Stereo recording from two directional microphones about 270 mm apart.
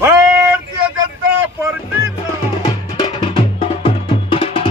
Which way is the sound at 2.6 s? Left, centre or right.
Centre.